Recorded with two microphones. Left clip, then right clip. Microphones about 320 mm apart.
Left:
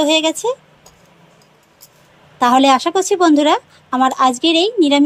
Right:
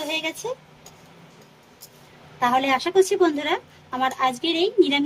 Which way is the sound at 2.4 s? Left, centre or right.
Centre.